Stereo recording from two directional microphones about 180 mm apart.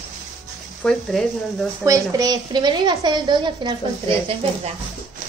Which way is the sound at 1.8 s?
20° right (ahead or behind).